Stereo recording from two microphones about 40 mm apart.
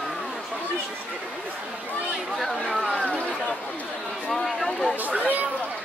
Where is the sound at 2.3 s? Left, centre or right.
Centre.